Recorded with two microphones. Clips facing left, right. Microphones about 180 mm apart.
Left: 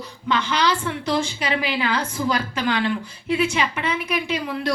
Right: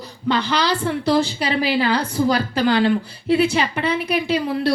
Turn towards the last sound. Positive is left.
turn(degrees=-35)  # may be behind; listen again after turning